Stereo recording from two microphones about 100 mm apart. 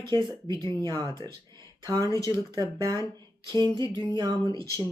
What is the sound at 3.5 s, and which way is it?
Speech, 50° right (ahead or behind).